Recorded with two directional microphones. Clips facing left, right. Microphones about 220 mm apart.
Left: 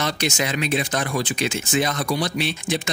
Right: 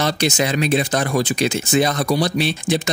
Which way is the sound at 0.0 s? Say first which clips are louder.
Right 5 dB; 35° right (ahead or behind).